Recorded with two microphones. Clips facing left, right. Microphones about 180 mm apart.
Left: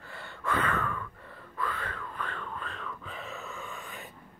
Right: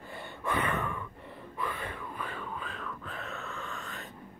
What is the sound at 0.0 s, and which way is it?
Gasp, 15° right (ahead or behind).